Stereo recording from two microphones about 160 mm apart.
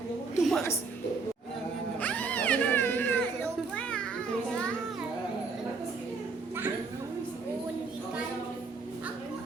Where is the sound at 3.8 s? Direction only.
5° left (ahead or behind).